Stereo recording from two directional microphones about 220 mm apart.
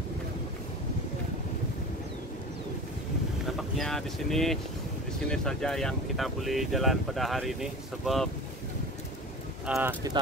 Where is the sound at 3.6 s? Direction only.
Centre (ahead or behind).